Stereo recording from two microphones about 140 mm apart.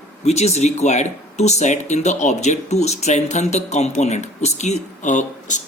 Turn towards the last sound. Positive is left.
turn(degrees=60)  # may be behind; listen again after turning